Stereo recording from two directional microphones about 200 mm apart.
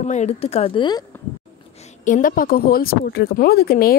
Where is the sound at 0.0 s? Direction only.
35° left (ahead or behind).